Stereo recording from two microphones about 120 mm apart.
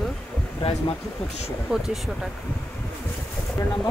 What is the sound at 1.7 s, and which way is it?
Speech, 5° right (ahead or behind).